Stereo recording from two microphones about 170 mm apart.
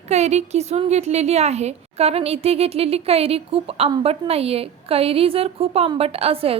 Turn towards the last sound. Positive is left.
turn(degrees=-35)  # may be behind; listen again after turning